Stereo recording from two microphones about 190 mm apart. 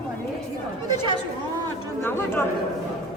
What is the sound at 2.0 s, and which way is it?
Speech, 10° left (ahead or behind).